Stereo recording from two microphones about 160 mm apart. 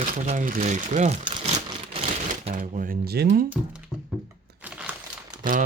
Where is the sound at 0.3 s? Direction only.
55° right (ahead or behind).